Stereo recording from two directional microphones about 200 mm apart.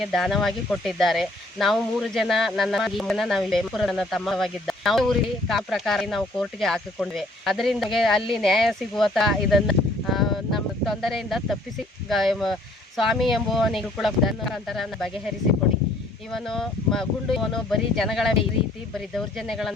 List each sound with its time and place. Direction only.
0.0 s speech: centre (ahead or behind)
16.3 s speech: centre (ahead or behind)